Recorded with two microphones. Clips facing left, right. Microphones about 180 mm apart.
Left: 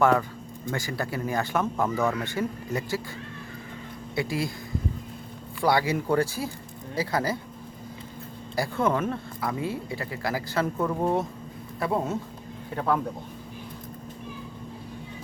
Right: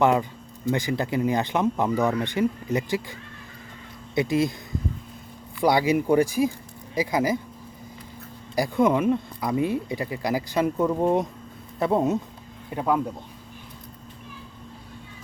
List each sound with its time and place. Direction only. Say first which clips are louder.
0.0 s speech: right 1 dB; 20° right (ahead or behind)
4.1 s speech: right 6 dB; 20° right (ahead or behind)
5.5 s speech: right 3 dB; 15° right (ahead or behind)
8.5 s speech: right 4 dB; 15° right (ahead or behind)